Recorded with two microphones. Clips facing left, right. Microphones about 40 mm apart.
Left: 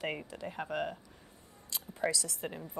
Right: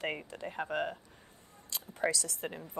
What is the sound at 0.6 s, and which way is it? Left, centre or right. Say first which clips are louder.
Speech: right 1 dB; right.